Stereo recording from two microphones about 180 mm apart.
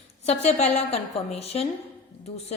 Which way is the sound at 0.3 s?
35° left (ahead or behind).